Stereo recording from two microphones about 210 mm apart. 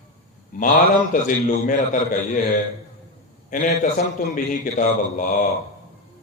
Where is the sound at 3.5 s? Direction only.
40° left (ahead or behind).